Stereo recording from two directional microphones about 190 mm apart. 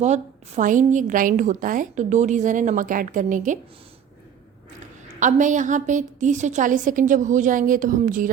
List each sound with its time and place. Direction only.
0.0 s a woman's voice: 35° right (ahead or behind)
5.2 s a woman's voice: 40° right (ahead or behind)